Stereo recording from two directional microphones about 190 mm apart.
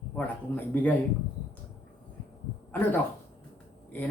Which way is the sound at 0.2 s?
10° left (ahead or behind).